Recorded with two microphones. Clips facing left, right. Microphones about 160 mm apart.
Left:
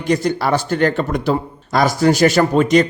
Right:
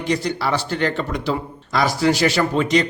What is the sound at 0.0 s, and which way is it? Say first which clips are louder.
A man's voice: left 4 dB; 45° left (ahead or behind).